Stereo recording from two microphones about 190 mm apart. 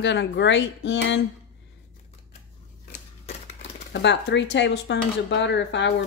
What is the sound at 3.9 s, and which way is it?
Speech, 65° left (ahead or behind).